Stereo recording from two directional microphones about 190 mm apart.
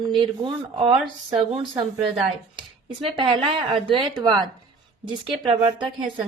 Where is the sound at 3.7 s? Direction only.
25° right (ahead or behind).